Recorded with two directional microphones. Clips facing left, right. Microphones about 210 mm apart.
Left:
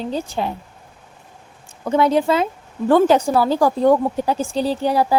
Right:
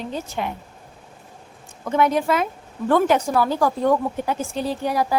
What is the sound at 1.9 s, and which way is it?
Speech, 30° left (ahead or behind).